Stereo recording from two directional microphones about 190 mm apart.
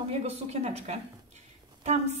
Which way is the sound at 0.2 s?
35° right (ahead or behind).